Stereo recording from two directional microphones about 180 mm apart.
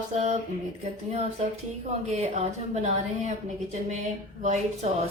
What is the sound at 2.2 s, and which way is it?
A woman's voice, 35° right (ahead or behind).